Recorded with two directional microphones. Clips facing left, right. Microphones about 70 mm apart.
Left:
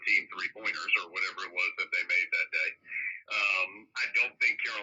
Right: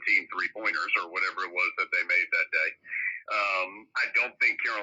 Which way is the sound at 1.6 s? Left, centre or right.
Right.